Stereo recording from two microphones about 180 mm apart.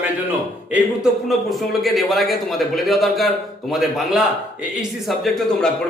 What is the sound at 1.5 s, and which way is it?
A man's voice, centre (ahead or behind).